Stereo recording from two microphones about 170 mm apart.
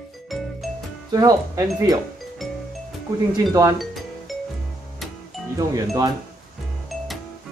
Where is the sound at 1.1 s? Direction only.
20° right (ahead or behind).